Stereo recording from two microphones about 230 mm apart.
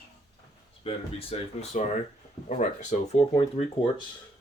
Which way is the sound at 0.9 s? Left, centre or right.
Left.